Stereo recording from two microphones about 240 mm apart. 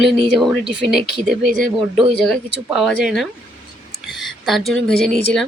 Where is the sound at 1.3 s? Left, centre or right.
Right.